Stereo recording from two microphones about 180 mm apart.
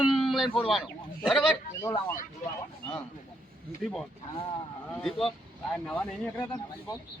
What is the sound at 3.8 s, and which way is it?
Speech, centre (ahead or behind).